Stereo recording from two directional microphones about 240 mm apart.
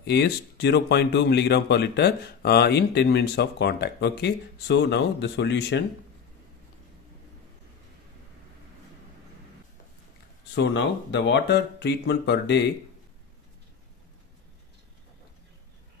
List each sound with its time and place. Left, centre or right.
0.0 s speech: left
10.5 s speech: left